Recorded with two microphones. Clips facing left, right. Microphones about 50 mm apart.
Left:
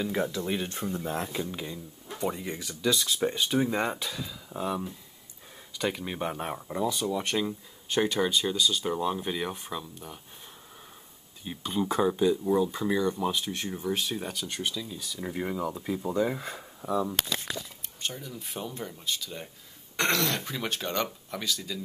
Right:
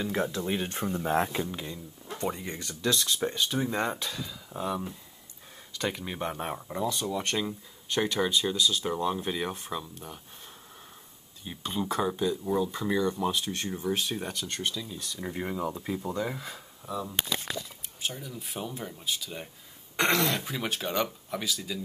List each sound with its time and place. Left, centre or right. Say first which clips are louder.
0.0 s speech: even; centre
1.0 s speech: right 9 dB; right
1.5 s speech: left 1 dB; centre
11.4 s speech: left 2 dB; centre
16.3 s speech: left 3 dB; left
18.0 s speech: even; centre
20.0 s speech: right 1 dB; centre
20.4 s speech: even; centre